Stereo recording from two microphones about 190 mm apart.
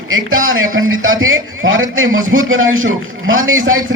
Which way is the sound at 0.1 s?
90° right.